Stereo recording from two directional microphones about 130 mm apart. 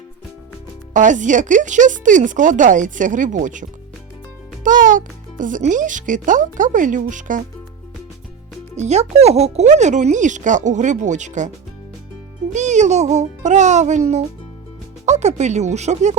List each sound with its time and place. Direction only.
0.9 s a child's voice: 80° right
8.7 s speech: 60° right (ahead or behind)
12.5 s speech: 65° right (ahead or behind)
15.0 s speech: 60° right (ahead or behind)